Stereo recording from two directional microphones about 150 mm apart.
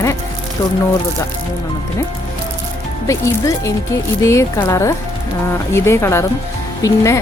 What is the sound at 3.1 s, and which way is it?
Speech, 20° left (ahead or behind).